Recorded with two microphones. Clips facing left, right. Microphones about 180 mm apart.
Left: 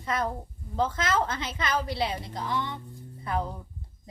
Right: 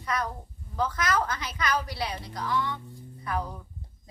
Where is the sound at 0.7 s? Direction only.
25° left (ahead or behind).